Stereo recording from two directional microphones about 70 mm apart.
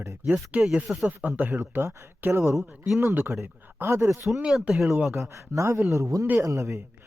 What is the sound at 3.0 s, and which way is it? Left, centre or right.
Speech, right.